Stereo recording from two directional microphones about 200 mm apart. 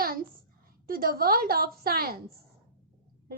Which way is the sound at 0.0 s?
45° right (ahead or behind).